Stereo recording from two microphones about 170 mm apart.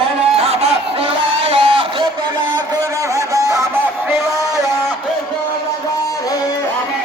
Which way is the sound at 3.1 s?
20° right (ahead or behind).